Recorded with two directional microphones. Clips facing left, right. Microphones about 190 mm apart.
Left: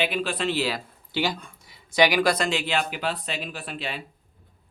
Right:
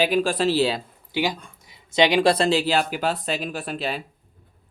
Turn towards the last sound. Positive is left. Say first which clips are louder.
# right 6 dB
turn(degrees=-40)  # may be behind; listen again after turning